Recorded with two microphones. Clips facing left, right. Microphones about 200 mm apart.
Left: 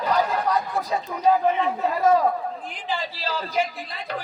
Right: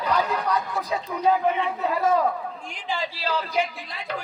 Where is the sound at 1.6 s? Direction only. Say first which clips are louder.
Left 2 dB; 40° left (ahead or behind).